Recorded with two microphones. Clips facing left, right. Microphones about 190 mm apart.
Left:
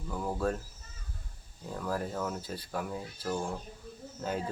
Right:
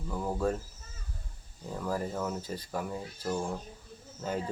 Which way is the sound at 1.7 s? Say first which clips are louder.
Right 1 dB; 5° right (ahead or behind).